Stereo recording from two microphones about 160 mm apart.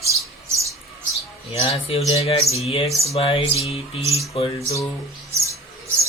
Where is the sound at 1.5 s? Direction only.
40° left (ahead or behind).